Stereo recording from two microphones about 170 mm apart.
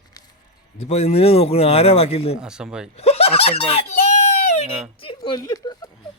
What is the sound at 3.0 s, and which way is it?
A child's voice, 35° left (ahead or behind).